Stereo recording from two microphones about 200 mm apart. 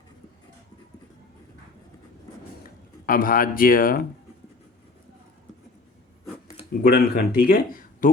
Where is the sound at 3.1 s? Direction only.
45° left (ahead or behind).